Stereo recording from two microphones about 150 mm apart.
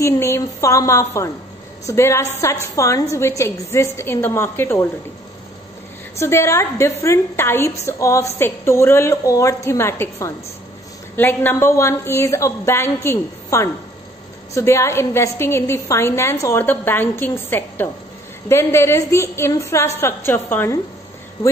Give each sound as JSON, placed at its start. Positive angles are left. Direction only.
{"t": 0.0, "sound": "a woman's voice", "side_deg": 20}
{"t": 6.1, "sound": "a woman's voice", "side_deg": 15}